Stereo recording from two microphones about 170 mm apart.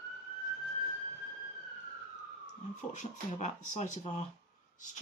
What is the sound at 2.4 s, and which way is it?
Speech, 45° left (ahead or behind).